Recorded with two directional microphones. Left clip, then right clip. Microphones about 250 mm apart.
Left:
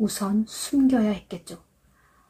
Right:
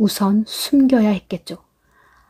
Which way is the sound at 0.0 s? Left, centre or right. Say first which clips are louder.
Right 8 dB; right.